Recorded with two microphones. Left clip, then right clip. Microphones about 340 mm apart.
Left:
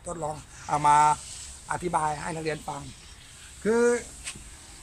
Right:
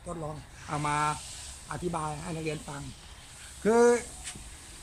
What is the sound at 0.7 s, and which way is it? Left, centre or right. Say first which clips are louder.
Speech: left 10 dB; left.